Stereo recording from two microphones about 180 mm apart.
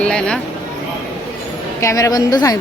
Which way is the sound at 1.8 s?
15° left (ahead or behind).